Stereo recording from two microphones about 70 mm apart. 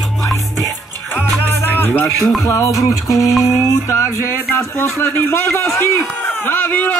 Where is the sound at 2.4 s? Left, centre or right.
Left.